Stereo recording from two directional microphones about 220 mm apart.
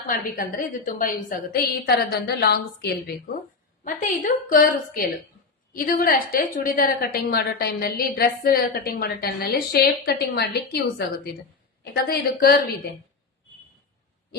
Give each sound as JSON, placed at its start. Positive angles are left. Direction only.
{"t": 0.1, "sound": "a woman's voice", "side_deg": 40}
{"t": 3.8, "sound": "a woman's voice", "side_deg": 35}